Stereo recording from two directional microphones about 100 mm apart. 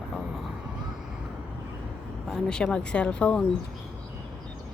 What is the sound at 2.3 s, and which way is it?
Speech, 5° left (ahead or behind).